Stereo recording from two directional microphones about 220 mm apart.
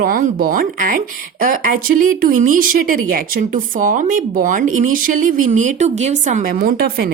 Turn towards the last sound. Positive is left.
turn(degrees=-45)  # may be behind; listen again after turning